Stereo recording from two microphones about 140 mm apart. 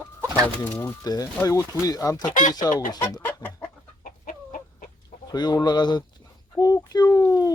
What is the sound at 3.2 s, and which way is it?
Chicken, 15° left (ahead or behind).